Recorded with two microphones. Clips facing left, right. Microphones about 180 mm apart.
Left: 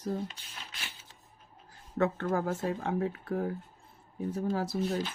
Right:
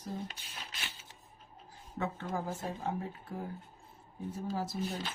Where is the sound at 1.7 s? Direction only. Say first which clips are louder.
Left 8 dB; 70° left (ahead or behind).